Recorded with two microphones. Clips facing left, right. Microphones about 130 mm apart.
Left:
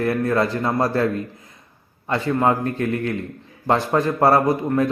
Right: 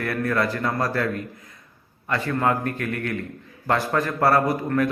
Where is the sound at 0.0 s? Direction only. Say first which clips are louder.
Left 4 dB; 25° left (ahead or behind).